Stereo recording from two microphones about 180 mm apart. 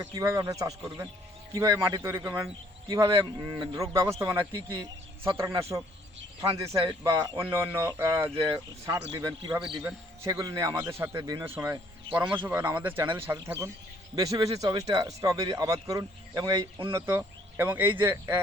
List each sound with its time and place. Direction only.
0.1 s speech: 20° right (ahead or behind)
2.9 s speech: 25° right (ahead or behind)
6.4 s speech: 30° right (ahead or behind)
7.0 s speech: 15° right (ahead or behind)
16.9 s speech: 10° right (ahead or behind)